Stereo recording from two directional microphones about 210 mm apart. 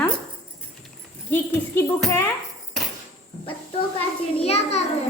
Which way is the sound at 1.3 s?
10° left (ahead or behind).